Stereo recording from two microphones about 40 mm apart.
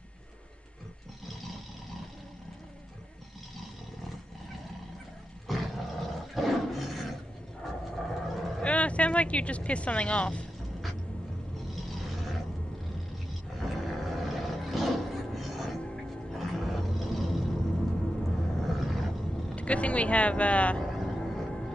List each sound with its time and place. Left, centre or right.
1.2 s vehicle: centre
5.5 s roar: centre
7.6 s vehicle: centre
8.6 s speech: left
11.5 s vehicle: centre
13.6 s a sound: centre
16.3 s roar: centre
18.6 s roar: centre
19.5 s vehicle: left
20.8 s vehicle: centre